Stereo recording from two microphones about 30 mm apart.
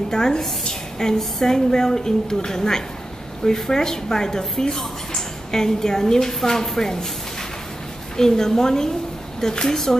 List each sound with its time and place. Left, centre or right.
0.1 s speech: centre
8.2 s a woman's voice: centre